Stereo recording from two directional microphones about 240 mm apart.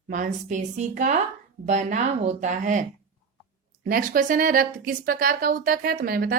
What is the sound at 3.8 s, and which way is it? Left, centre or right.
Speech, right.